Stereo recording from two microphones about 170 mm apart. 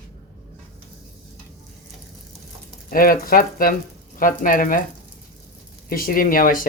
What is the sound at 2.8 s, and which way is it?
Speech, 55° left (ahead or behind).